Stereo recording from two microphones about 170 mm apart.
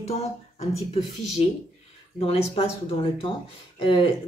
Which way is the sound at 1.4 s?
40° left (ahead or behind).